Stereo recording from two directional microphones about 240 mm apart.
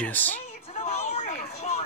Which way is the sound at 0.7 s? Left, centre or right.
Left.